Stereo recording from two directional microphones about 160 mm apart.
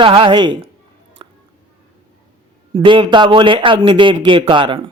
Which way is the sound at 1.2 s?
30° right (ahead or behind).